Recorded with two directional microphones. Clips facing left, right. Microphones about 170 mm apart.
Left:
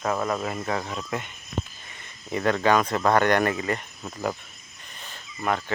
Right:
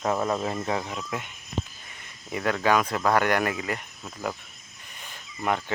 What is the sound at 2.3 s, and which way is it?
Speech, 5° right (ahead or behind).